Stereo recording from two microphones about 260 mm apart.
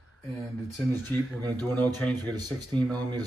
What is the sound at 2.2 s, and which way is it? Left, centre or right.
Speech, centre.